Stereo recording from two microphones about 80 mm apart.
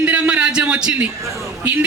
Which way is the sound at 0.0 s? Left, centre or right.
Centre.